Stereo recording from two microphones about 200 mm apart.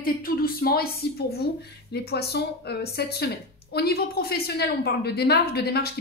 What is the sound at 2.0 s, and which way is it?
A woman's voice, 55° left (ahead or behind).